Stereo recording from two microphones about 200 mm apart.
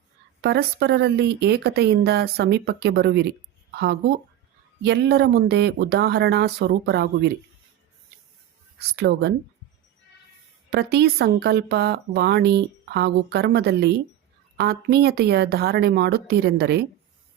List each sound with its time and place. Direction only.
0.4 s speech: 55° right (ahead or behind)
4.8 s speech: 55° right (ahead or behind)
9.0 s speech: 55° right (ahead or behind)
10.7 s speech: 55° right (ahead or behind)